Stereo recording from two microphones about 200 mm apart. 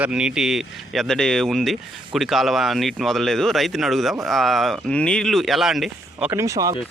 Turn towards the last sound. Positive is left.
turn(degrees=-15)  # may be behind; listen again after turning